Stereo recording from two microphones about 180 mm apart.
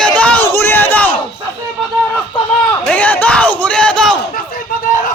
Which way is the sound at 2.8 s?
10° left (ahead or behind).